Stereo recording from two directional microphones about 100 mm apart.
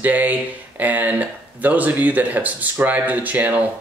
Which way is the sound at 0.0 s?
15° right (ahead or behind).